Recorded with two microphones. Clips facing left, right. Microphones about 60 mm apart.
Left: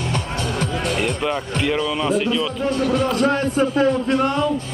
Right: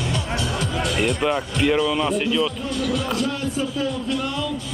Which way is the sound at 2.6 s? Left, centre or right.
Left.